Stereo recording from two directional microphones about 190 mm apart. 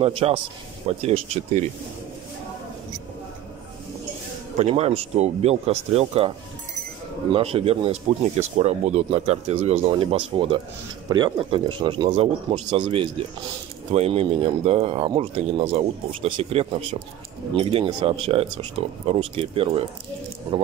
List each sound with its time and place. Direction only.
0.0 s speech: 30° right (ahead or behind)
4.6 s speech: 30° right (ahead or behind)
7.3 s speech: 30° right (ahead or behind)